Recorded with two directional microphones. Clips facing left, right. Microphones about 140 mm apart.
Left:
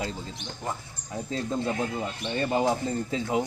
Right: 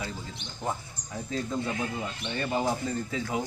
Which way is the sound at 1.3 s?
25° left (ahead or behind).